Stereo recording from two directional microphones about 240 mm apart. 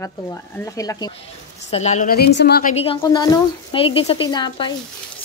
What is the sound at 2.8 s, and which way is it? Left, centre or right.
Speech, left.